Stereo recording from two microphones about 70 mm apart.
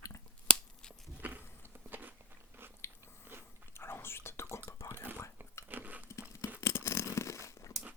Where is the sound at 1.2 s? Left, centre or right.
Right.